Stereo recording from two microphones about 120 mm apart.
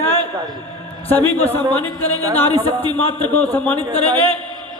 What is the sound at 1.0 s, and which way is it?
Speech, 15° left (ahead or behind).